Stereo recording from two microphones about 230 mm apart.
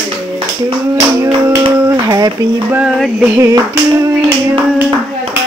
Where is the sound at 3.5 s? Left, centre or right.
Centre.